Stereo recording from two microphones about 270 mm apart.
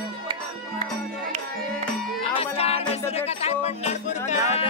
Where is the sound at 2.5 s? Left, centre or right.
Left.